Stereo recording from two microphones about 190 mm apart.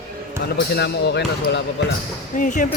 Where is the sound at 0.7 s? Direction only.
60° left (ahead or behind).